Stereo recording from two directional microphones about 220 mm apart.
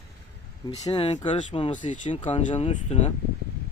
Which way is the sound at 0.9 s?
25° left (ahead or behind).